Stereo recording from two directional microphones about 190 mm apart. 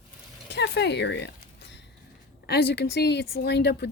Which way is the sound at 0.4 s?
65° left (ahead or behind).